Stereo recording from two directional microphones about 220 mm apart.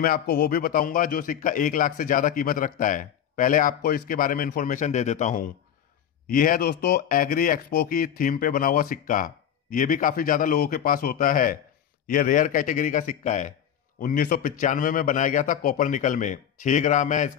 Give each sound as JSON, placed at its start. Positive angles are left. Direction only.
{"t": 0.0, "sound": "a man's voice", "side_deg": 40}